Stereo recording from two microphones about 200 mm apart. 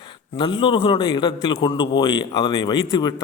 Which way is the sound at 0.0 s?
25° left (ahead or behind).